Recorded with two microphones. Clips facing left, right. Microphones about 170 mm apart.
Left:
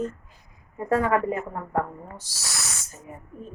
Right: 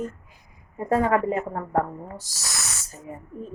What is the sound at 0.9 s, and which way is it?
Speech, 20° right (ahead or behind).